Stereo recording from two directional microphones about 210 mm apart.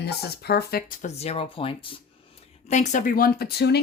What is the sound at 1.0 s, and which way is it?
Speech, 30° left (ahead or behind).